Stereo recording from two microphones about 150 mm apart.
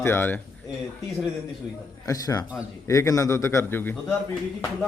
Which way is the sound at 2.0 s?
25° left (ahead or behind).